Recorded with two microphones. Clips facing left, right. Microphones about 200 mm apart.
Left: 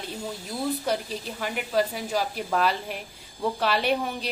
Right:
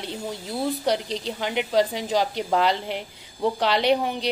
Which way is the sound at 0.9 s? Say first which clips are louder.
Right 4 dB; 80° right.